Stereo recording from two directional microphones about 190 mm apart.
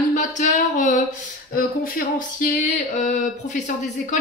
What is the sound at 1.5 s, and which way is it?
A woman's voice, 50° left (ahead or behind).